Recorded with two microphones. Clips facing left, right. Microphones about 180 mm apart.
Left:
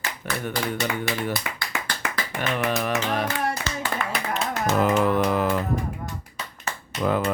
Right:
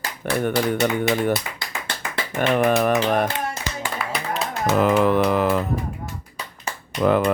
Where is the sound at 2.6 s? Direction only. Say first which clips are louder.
Right 6 dB; 55° right (ahead or behind).